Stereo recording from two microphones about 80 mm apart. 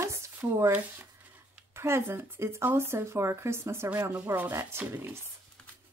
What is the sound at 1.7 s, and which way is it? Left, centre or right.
Speech, right.